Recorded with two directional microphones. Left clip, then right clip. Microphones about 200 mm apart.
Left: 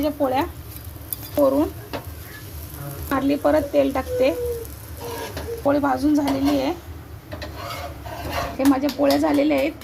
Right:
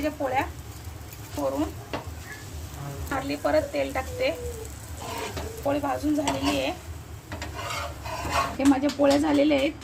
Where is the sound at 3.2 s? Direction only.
20° left (ahead or behind).